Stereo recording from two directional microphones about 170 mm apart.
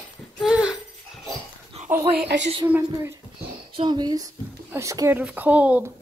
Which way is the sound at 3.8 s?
25° right (ahead or behind).